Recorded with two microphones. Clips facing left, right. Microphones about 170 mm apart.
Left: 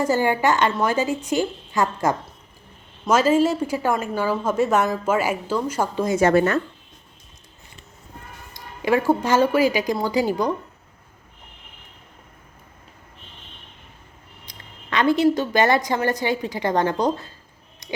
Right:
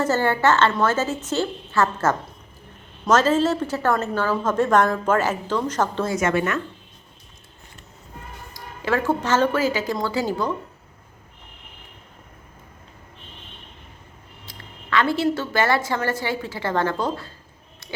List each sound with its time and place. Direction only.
0.0 s a woman's voice: 15° left (ahead or behind)
6.1 s speech: 35° left (ahead or behind)
8.5 s a woman's voice: 15° left (ahead or behind)
14.4 s a woman's voice: 20° left (ahead or behind)